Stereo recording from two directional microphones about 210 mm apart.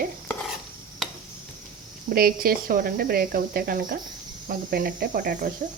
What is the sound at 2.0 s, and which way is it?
Speech, 45° right (ahead or behind).